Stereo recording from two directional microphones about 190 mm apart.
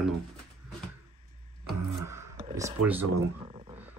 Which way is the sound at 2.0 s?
15° right (ahead or behind).